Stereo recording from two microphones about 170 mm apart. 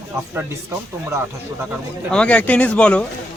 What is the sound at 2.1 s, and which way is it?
Speech, 5° left (ahead or behind).